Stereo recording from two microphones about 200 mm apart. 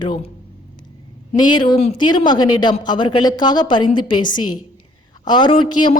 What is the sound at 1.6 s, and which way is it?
A woman's voice, 25° left (ahead or behind).